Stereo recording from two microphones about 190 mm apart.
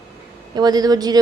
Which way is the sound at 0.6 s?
20° right (ahead or behind).